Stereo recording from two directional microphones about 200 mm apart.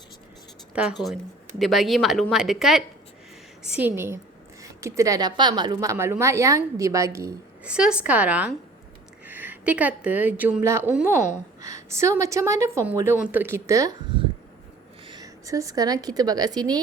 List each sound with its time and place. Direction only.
0.7 s a woman's voice: 5° right (ahead or behind)